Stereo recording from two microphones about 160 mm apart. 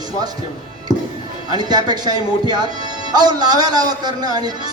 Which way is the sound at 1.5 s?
25° right (ahead or behind).